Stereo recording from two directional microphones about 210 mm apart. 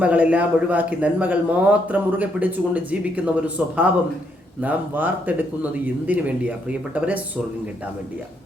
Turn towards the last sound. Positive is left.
turn(degrees=-5)  # may be behind; listen again after turning